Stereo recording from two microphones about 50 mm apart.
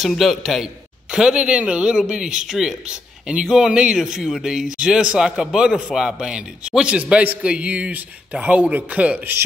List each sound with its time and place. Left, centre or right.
0.2 s a man's voice: centre
1.1 s a man's voice: centre